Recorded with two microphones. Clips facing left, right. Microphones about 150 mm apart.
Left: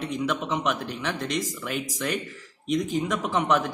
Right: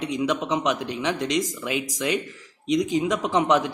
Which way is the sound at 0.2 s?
15° right (ahead or behind).